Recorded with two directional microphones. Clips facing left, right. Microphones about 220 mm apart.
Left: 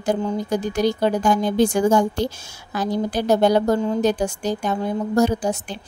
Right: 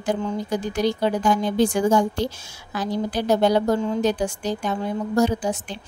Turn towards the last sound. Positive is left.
turn(degrees=45)  # may be behind; listen again after turning